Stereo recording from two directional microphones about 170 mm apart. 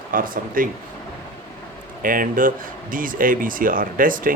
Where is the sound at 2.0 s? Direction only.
55° right (ahead or behind).